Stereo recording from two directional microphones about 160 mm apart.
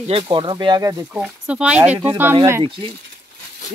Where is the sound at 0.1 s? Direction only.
30° right (ahead or behind).